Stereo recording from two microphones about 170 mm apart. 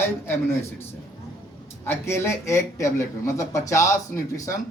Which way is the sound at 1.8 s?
15° left (ahead or behind).